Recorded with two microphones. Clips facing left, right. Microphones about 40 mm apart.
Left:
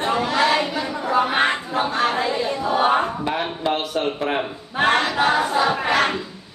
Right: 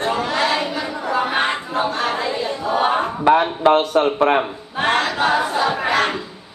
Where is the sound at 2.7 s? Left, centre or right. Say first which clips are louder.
Even; centre.